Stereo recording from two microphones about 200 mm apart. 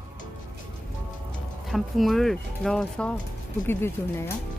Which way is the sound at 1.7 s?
Centre (ahead or behind).